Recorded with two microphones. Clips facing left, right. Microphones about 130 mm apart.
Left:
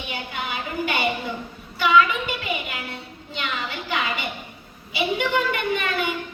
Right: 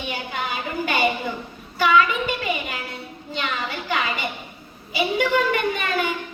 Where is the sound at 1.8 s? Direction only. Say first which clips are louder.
Even; 45° right (ahead or behind).